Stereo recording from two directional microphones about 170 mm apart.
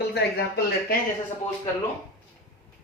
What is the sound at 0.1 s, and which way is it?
Speech, 70° left (ahead or behind).